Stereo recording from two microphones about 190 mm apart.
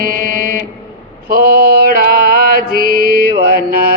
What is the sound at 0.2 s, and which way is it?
Music, 50° right (ahead or behind).